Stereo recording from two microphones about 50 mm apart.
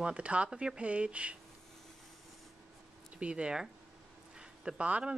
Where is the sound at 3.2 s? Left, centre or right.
Right.